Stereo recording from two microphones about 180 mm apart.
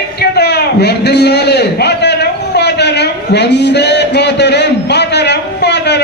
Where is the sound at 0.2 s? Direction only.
65° left (ahead or behind).